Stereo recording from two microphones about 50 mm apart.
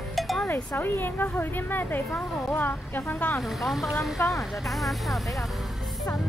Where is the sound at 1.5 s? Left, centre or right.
Left.